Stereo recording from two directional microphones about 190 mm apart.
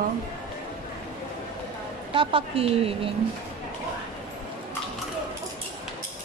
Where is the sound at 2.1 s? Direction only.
30° right (ahead or behind).